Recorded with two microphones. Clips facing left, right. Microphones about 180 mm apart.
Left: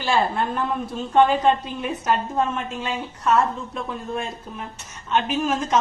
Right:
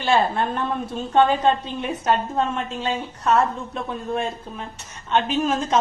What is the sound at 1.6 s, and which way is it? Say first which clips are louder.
A woman's voice: right 1 dB; 25° right (ahead or behind).